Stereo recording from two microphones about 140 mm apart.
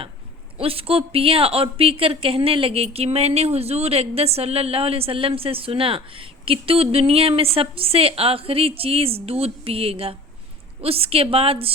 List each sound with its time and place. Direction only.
0.6 s a woman's voice: 45° right (ahead or behind)